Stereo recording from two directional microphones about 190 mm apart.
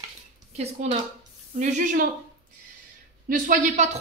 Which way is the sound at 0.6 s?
35° right (ahead or behind).